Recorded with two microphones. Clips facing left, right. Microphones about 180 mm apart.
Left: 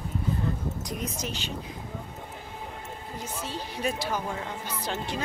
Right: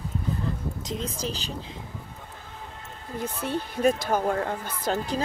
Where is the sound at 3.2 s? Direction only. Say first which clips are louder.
Right 7 dB; 60° right (ahead or behind).